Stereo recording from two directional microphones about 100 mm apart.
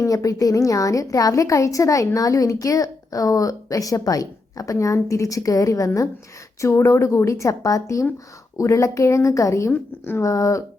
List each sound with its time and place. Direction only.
0.0 s a woman's voice: 35° left (ahead or behind)